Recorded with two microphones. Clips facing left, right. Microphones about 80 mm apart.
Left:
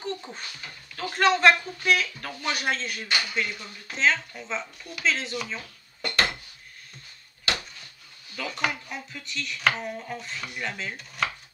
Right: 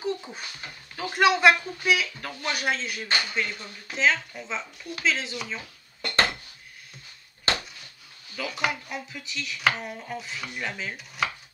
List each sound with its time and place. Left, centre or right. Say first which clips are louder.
0.0 s a sound: right 3 dB; centre
0.9 s speech: right 1 dB; centre
3.8 s chopping: even; centre
5.0 s speech: left 1 dB; centre
7.5 s a sound: right 2 dB; right
8.4 s chopping: right 1 dB; centre